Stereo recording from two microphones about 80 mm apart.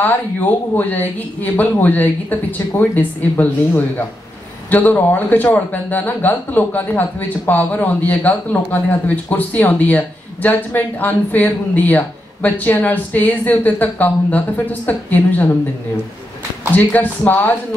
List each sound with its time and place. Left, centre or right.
0.0 s speech: left
16.7 s speech: left